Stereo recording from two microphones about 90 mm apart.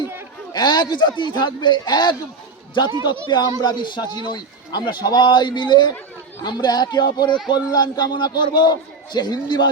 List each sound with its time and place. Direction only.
0.5 s a man's voice: 55° left (ahead or behind)